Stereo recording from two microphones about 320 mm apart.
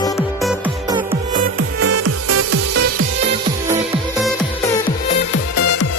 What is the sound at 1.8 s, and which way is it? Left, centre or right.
Music, right.